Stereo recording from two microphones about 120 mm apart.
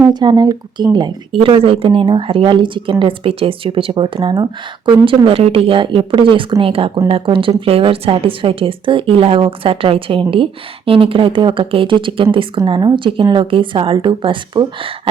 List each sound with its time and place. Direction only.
0.0 s a woman's voice: 35° right (ahead or behind)